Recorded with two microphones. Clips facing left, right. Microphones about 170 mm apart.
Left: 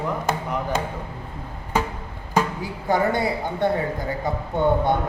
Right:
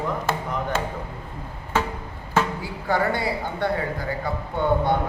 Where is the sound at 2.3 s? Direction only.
20° left (ahead or behind).